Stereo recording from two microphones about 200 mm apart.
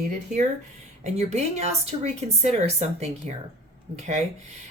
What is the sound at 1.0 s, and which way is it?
A woman's voice, 35° right (ahead or behind).